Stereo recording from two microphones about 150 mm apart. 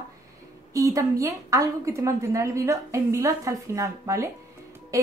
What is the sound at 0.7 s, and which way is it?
A woman's voice, 20° right (ahead or behind).